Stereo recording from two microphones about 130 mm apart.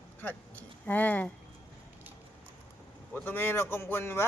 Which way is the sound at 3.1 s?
15° left (ahead or behind).